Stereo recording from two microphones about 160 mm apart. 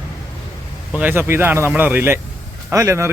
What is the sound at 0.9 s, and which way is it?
Speech, 10° right (ahead or behind).